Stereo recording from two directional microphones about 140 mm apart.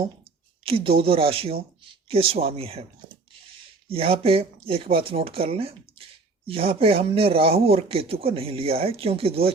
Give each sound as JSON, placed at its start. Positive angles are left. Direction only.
{"t": 0.6, "sound": "speech", "side_deg": -40}
{"t": 3.8, "sound": "speech", "side_deg": -40}